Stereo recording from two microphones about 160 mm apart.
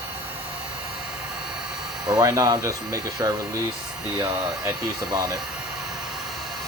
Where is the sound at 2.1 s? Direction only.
25° right (ahead or behind).